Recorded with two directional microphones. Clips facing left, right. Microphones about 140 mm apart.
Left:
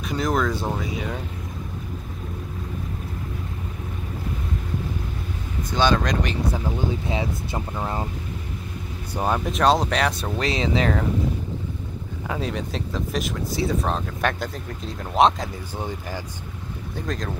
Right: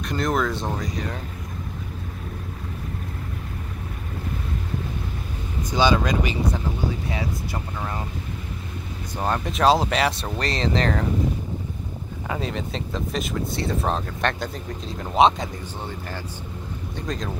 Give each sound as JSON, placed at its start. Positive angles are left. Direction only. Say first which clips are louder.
{"t": 0.0, "sound": "speech", "louder": "even", "side_deg": 0}
{"t": 5.7, "sound": "speech", "louder": "right 1 dB", "side_deg": -10}
{"t": 7.1, "sound": "speech", "louder": "left 2 dB", "side_deg": 25}
{"t": 9.1, "sound": "speech", "louder": "left 2 dB", "side_deg": 10}
{"t": 12.3, "sound": "speech", "louder": "even", "side_deg": 0}
{"t": 16.9, "sound": "speech", "louder": "left 1 dB", "side_deg": 0}